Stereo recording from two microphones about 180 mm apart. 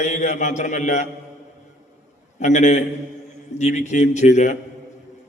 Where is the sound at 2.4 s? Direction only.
40° left (ahead or behind).